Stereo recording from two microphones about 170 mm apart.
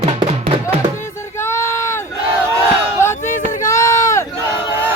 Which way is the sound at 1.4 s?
15° left (ahead or behind).